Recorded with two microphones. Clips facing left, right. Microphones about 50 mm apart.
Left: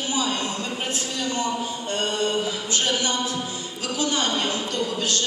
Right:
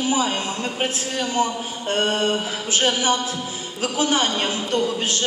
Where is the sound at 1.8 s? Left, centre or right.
Right.